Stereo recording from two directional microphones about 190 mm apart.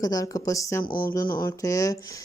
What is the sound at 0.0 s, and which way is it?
Speech, 20° left (ahead or behind).